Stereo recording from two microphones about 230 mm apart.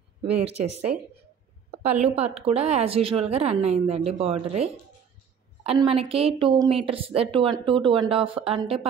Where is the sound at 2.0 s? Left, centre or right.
Right.